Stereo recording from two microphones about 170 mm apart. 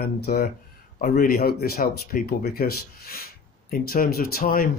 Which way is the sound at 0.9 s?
55° left (ahead or behind).